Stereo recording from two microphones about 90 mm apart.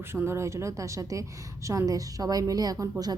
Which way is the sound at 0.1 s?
25° right (ahead or behind).